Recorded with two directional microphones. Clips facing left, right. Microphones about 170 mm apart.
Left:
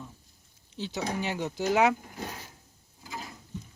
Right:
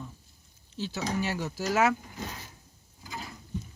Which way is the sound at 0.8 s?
20° left (ahead or behind).